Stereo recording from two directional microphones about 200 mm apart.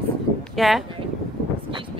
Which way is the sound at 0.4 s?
Centre (ahead or behind).